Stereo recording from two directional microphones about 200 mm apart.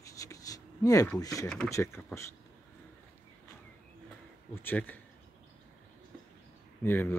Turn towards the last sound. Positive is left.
turn(degrees=10)  # may be behind; listen again after turning